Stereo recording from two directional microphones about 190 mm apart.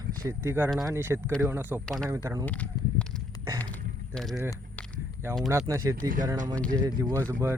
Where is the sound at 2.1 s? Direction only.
15° right (ahead or behind).